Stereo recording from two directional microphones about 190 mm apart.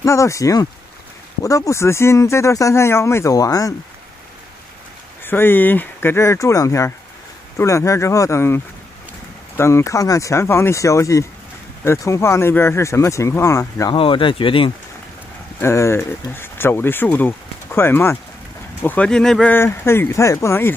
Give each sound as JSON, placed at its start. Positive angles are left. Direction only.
{"t": 0.0, "sound": "speech", "side_deg": 15}
{"t": 5.2, "sound": "speech", "side_deg": 10}
{"t": 9.6, "sound": "speech", "side_deg": 15}
{"t": 13.9, "sound": "speech", "side_deg": 25}
{"t": 15.6, "sound": "speech", "side_deg": 15}